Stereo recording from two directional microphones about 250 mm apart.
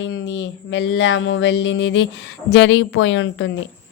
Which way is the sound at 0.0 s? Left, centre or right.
Left.